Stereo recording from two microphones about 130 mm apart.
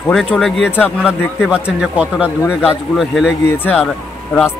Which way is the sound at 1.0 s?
5° right (ahead or behind).